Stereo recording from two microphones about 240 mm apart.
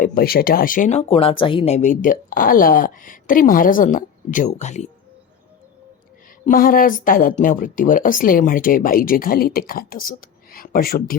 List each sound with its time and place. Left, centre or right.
0.0 s speech: left
6.4 s speech: left